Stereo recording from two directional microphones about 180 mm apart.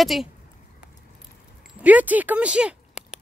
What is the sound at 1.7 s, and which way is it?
Speech, 10° right (ahead or behind).